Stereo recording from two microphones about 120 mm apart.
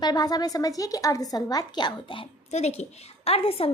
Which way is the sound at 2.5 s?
65° left (ahead or behind).